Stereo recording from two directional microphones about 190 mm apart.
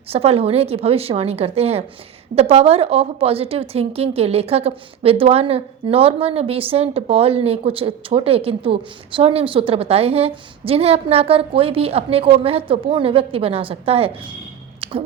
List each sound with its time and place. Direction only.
0.1 s a woman's voice: 30° right (ahead or behind)